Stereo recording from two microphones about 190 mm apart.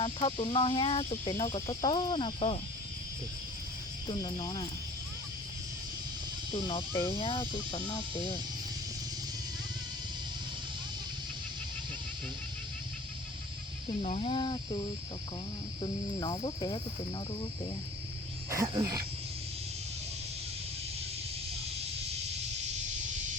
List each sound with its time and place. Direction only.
0.0 s cricket: 30° left (ahead or behind)
1.8 s cricket: 25° left (ahead or behind)
4.0 s cricket: 20° left (ahead or behind)
6.5 s cricket: 25° left (ahead or behind)
14.0 s cricket: 30° left (ahead or behind)
18.5 s speech: 15° right (ahead or behind)